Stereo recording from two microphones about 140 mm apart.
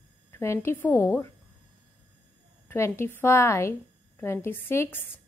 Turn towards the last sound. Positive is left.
turn(degrees=15)  # may be behind; listen again after turning